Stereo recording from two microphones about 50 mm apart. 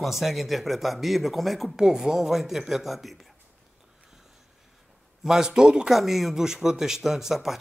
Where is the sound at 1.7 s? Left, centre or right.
Centre.